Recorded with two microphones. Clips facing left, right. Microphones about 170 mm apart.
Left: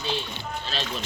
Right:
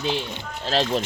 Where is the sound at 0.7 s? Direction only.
90° right.